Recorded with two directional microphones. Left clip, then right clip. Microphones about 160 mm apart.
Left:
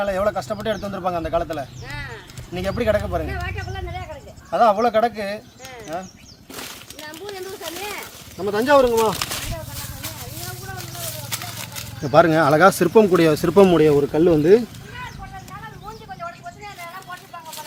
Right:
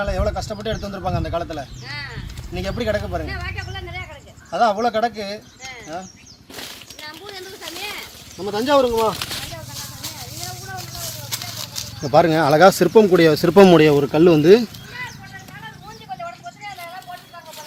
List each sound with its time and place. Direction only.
0.0 s a man's voice: centre (ahead or behind)
1.9 s clip-clop: 70° left (ahead or behind)
2.6 s a man's voice: centre (ahead or behind)
3.2 s a sound: 65° left (ahead or behind)
4.5 s a man's voice: centre (ahead or behind)
8.4 s speech: 10° left (ahead or behind)
8.8 s speech: 20° left (ahead or behind)
12.0 s speech: 20° right (ahead or behind)
13.5 s speech: 45° right (ahead or behind)
13.7 s speech: 75° right (ahead or behind)